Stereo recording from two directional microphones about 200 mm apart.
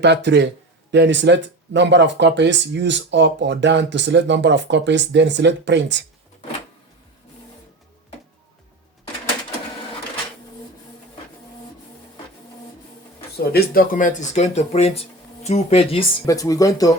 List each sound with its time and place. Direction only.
0.0 s speech: 60° right (ahead or behind)
13.4 s speech: 50° left (ahead or behind); by 16.0 s 30° left (ahead or behind)
16.2 s speech: 15° left (ahead or behind)